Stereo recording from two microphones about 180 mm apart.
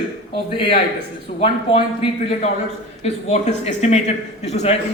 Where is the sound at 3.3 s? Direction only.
40° left (ahead or behind).